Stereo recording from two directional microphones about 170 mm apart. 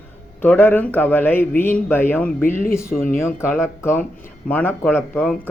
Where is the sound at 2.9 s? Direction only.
55° left (ahead or behind).